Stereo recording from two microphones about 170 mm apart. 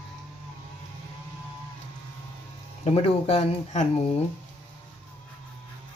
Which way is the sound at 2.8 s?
40° left (ahead or behind).